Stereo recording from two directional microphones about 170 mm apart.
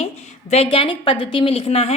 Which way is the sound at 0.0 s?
40° left (ahead or behind).